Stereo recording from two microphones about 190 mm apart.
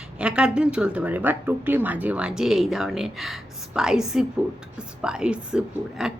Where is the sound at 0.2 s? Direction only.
5° right (ahead or behind).